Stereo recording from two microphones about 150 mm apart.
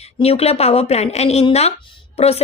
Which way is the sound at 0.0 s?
40° left (ahead or behind).